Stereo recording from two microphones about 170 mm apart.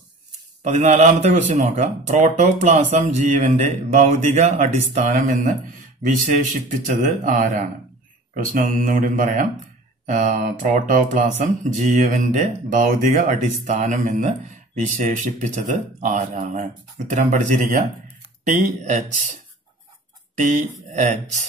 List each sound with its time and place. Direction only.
0.7 s speech: 45° right (ahead or behind)
20.3 s speech: 50° right (ahead or behind)